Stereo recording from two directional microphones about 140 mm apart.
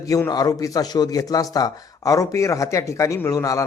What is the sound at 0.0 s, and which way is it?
A man's voice, 25° left (ahead or behind).